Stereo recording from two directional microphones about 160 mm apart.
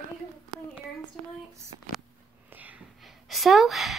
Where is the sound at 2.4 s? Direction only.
10° right (ahead or behind).